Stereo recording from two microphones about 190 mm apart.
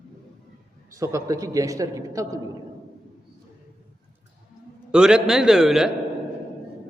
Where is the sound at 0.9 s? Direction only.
15° right (ahead or behind).